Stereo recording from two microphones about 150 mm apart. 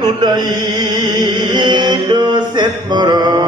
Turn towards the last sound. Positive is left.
turn(degrees=-30)  # may be behind; listen again after turning